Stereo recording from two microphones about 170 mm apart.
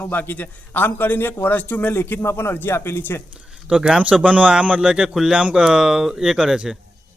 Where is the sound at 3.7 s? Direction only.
5° right (ahead or behind).